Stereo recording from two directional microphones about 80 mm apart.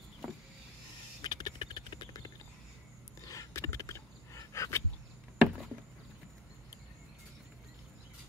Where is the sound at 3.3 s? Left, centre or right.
Left.